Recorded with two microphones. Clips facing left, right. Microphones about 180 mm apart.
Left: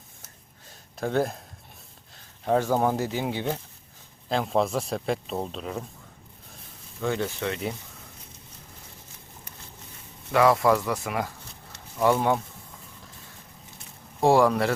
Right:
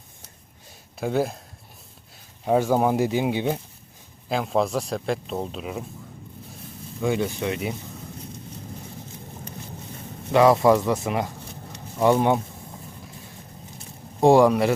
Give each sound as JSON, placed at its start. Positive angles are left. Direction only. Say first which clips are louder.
{"t": 0.9, "sound": "speech", "louder": "right 1 dB", "side_deg": -5}
{"t": 2.4, "sound": "speech", "louder": "right 3 dB", "side_deg": -10}
{"t": 4.3, "sound": "speech", "louder": "right 1 dB", "side_deg": 0}
{"t": 7.0, "sound": "speech", "louder": "right 3 dB", "side_deg": -15}
{"t": 10.3, "sound": "speech", "louder": "right 4 dB", "side_deg": -20}
{"t": 14.2, "sound": "speech", "louder": "right 4 dB", "side_deg": -20}